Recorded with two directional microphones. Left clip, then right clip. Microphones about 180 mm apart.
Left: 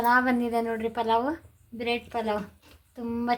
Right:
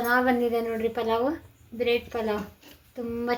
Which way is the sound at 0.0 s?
35° left (ahead or behind).